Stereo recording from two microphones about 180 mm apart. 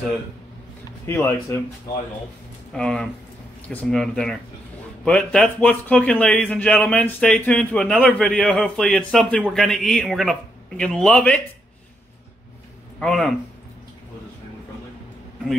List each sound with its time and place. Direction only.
1.0 s speech: 10° left (ahead or behind)
2.7 s speech: 5° left (ahead or behind)
13.0 s speech: 5° left (ahead or behind)